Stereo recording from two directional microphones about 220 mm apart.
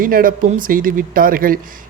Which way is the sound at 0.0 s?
40° right (ahead or behind).